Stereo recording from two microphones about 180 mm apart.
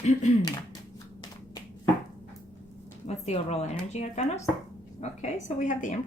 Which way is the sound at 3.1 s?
35° left (ahead or behind).